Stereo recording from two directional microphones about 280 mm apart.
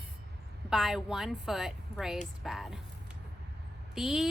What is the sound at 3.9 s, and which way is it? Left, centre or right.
Speech, centre.